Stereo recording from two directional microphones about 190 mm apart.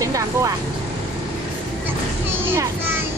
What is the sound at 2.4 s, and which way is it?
Speech, 10° right (ahead or behind).